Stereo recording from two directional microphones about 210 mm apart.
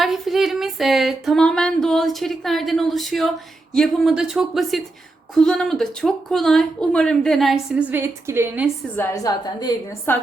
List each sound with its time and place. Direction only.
0.0 s speech: centre (ahead or behind)
9.0 s a woman's voice: 15° left (ahead or behind)